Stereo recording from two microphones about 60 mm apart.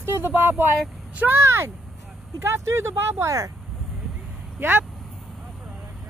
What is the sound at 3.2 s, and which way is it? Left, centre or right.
Speech, right.